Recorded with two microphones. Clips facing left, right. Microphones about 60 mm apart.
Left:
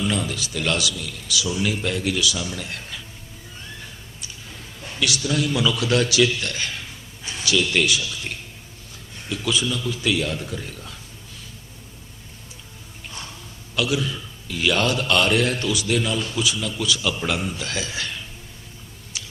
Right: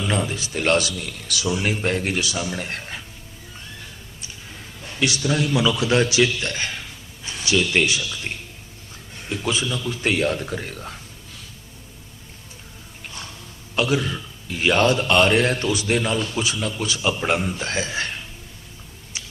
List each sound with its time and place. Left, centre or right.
0.1 s a man's voice: right
4.9 s a man's voice: right
9.3 s a man's voice: right
13.7 s a man's voice: right
19.1 s a sound: right